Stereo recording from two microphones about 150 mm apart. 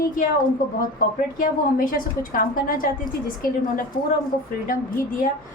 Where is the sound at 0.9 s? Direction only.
70° left (ahead or behind).